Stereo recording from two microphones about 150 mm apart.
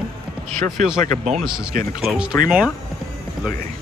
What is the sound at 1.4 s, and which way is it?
Speech, 5° right (ahead or behind).